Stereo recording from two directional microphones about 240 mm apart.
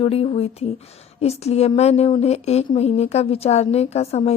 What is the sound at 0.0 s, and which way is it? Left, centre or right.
A woman's voice, left.